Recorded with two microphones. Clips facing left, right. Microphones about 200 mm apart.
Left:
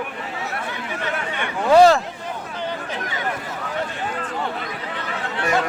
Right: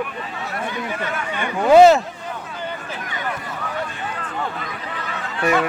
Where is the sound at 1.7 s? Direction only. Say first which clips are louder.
Right 2 dB; 20° right (ahead or behind).